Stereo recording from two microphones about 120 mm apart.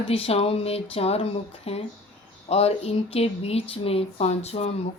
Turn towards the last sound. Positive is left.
turn(degrees=60)  # may be behind; listen again after turning